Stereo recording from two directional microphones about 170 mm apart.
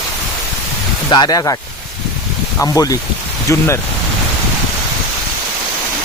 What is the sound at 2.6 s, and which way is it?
Speech, 20° left (ahead or behind).